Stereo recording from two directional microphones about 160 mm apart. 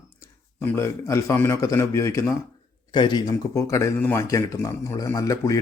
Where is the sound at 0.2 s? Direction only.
15° left (ahead or behind).